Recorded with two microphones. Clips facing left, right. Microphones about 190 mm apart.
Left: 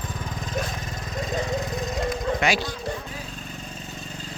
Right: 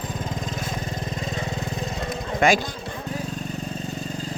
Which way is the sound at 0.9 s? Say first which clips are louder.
Right 5 dB; 30° right (ahead or behind).